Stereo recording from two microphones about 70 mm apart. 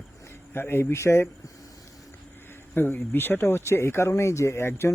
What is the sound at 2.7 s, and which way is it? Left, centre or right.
Speech, left.